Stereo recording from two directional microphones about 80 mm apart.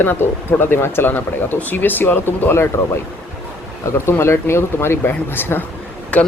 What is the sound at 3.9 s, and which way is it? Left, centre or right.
Speech, left.